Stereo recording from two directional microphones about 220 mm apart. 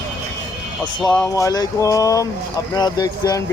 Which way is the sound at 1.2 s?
15° left (ahead or behind).